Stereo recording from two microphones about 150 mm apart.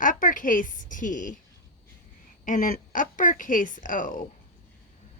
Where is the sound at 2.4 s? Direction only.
60° left (ahead or behind).